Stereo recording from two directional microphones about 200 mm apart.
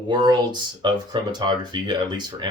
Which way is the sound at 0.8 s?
20° right (ahead or behind).